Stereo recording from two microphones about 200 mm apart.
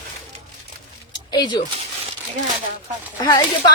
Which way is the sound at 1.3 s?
20° left (ahead or behind).